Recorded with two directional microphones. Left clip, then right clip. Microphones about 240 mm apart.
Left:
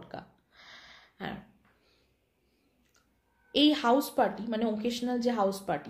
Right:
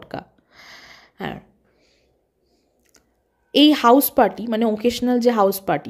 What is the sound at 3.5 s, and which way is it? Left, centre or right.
A woman's voice, right.